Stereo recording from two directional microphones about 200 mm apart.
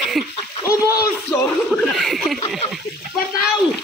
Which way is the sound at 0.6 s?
15° left (ahead or behind).